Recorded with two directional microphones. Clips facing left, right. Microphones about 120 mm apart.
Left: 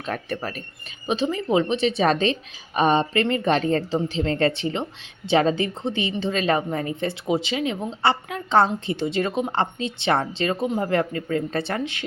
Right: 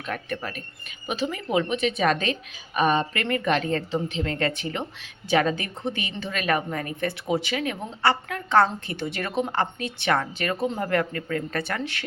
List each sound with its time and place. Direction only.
0.0 s speech: 35° left (ahead or behind)
1.0 s a woman's voice: 25° left (ahead or behind)